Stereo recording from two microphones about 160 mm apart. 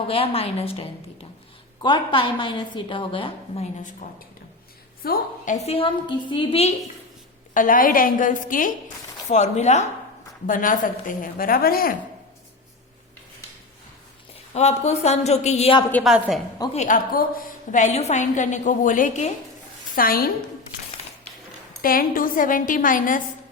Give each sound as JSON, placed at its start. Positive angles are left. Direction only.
{"t": 0.1, "sound": "a woman's voice", "side_deg": 35}
{"t": 5.0, "sound": "a woman's voice", "side_deg": 70}
{"t": 5.6, "sound": "a woman's voice", "side_deg": 35}
{"t": 7.5, "sound": "a woman's voice", "side_deg": 55}
{"t": 9.3, "sound": "a woman's voice", "side_deg": 45}
{"t": 10.4, "sound": "a woman's voice", "side_deg": 55}
{"t": 14.5, "sound": "a woman's voice", "side_deg": 45}
{"t": 16.0, "sound": "a woman's voice", "side_deg": 0}
{"t": 16.7, "sound": "a woman's voice", "side_deg": 50}
{"t": 20.0, "sound": "a woman's voice", "side_deg": 65}
{"t": 21.8, "sound": "a woman's voice", "side_deg": 65}